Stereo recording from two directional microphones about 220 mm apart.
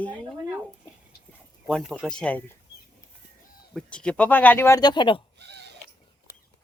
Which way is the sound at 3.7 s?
5° left (ahead or behind).